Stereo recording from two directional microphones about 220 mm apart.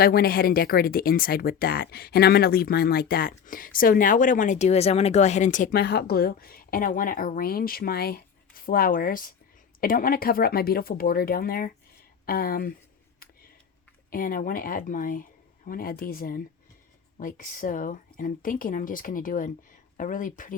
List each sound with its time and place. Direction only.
0.0 s speech: 45° left (ahead or behind)
14.1 s speech: 40° left (ahead or behind)